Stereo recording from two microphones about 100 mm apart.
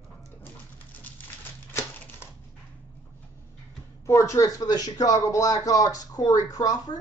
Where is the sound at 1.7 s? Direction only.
25° left (ahead or behind).